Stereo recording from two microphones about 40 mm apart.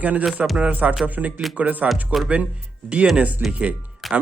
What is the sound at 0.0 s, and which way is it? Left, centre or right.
Speech, right.